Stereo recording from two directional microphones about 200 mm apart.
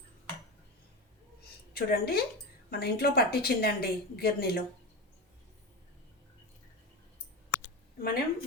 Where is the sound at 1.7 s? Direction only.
50° left (ahead or behind).